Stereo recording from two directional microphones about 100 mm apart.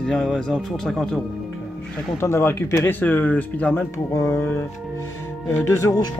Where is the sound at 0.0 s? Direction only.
5° left (ahead or behind).